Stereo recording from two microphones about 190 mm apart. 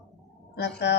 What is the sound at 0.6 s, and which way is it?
Speech, 65° left (ahead or behind).